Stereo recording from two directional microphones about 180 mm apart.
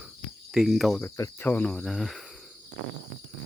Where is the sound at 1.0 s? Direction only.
15° left (ahead or behind); by 2.5 s centre (ahead or behind).